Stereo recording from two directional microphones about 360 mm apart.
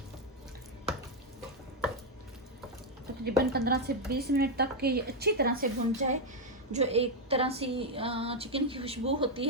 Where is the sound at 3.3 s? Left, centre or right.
Right.